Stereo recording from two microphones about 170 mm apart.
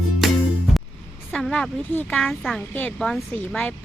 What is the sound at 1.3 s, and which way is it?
Speech, 5° left (ahead or behind).